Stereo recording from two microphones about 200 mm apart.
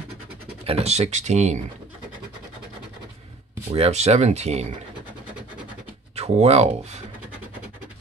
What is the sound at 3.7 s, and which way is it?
Speech, 35° right (ahead or behind).